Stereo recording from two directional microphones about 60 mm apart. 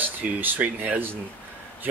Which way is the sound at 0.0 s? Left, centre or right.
Right.